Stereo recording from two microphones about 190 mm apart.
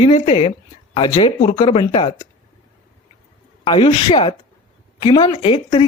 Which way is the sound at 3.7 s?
30° left (ahead or behind).